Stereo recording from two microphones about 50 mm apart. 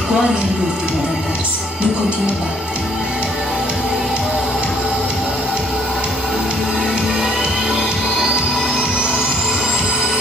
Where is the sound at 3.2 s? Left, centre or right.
Centre.